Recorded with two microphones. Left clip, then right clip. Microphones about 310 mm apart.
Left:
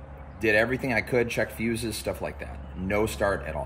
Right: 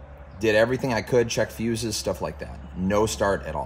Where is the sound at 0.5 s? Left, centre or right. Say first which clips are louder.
Right 3 dB; centre.